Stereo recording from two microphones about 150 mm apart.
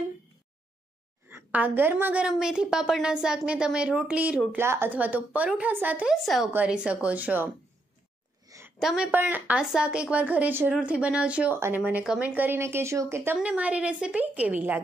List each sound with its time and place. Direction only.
1.3 s a woman's voice: 10° right (ahead or behind)
6.2 s a woman's voice: centre (ahead or behind)
8.5 s a sound: 20° right (ahead or behind)
8.8 s a woman's voice: 5° right (ahead or behind)